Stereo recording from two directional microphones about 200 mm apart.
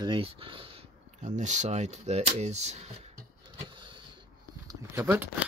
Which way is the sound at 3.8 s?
25° right (ahead or behind).